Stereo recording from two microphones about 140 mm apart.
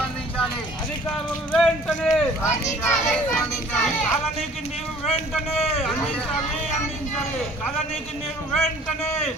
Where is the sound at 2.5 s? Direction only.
20° left (ahead or behind).